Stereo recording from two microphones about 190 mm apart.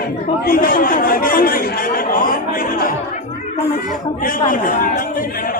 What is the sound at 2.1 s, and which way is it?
Chatter, 45° left (ahead or behind).